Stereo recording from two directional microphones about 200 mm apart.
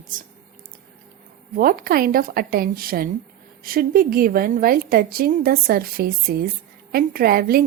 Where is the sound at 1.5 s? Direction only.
45° right (ahead or behind).